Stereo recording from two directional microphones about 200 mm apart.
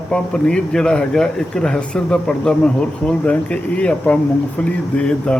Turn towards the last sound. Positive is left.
turn(degrees=5)  # may be behind; listen again after turning